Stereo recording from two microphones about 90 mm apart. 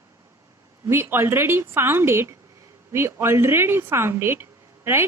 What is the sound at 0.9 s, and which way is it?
A woman's voice, 25° right (ahead or behind).